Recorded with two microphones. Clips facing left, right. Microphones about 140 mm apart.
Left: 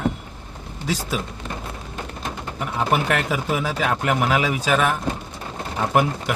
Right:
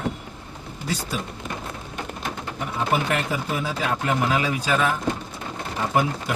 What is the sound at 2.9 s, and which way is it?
Speech, 90° left.